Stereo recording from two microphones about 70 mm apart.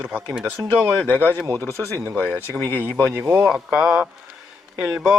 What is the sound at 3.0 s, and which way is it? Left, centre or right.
Speech, right.